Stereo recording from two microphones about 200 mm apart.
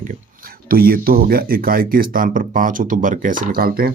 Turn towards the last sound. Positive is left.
turn(degrees=-45)  # may be behind; listen again after turning